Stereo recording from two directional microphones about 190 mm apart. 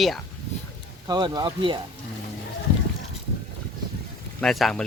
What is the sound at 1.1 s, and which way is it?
Speech, 20° right (ahead or behind).